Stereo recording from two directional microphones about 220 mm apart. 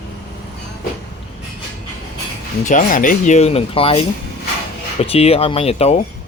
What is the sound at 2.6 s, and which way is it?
Speech, 35° left (ahead or behind).